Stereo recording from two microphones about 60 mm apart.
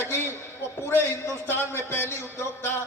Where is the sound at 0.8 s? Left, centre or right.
Left.